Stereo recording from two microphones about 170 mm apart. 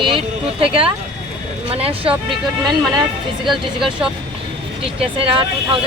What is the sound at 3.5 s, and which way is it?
Speech, centre (ahead or behind).